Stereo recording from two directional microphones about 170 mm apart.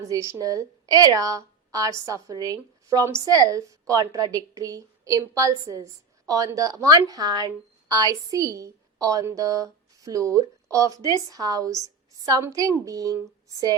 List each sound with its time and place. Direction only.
0.1 s a woman's voice: 20° right (ahead or behind)